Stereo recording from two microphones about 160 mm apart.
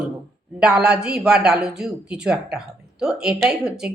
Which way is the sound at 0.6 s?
5° right (ahead or behind).